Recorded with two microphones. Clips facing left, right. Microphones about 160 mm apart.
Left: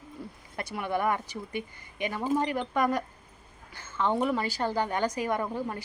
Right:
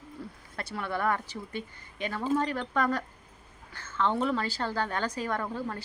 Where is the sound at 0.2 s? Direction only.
15° left (ahead or behind).